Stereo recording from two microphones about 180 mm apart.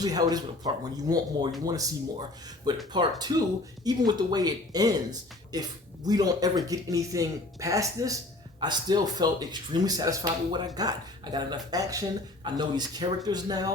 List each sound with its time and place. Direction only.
0.0 s speech: 20° right (ahead or behind)
2.9 s speech: 25° right (ahead or behind)